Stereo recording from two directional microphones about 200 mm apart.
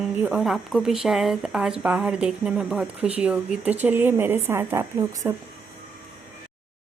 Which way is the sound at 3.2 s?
5° right (ahead or behind).